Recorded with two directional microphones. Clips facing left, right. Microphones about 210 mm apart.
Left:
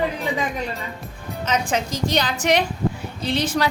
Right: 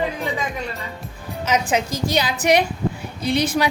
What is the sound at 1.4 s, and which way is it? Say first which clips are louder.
A woman's voice: right 2 dB; 10° right (ahead or behind).